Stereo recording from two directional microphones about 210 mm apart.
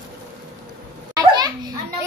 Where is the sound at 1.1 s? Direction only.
20° right (ahead or behind).